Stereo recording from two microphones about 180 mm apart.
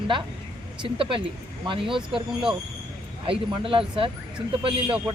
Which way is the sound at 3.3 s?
30° right (ahead or behind).